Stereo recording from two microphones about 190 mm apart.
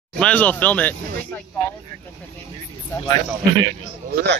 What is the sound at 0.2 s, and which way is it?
Speech, 10° left (ahead or behind).